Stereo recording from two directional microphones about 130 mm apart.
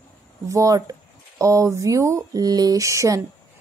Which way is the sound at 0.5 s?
25° right (ahead or behind).